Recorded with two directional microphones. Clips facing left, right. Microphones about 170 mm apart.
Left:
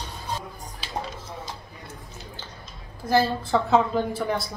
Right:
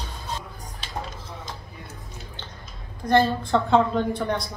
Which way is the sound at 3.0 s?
5° left (ahead or behind).